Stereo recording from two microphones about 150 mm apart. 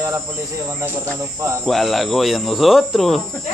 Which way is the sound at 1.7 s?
Centre (ahead or behind).